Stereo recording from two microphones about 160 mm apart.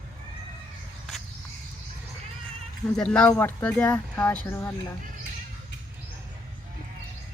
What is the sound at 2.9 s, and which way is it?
Speech, 5° left (ahead or behind).